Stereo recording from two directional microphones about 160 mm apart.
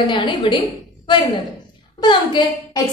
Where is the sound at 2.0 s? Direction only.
30° left (ahead or behind).